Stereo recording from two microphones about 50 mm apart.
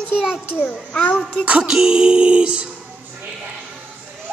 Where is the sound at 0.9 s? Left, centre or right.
Left.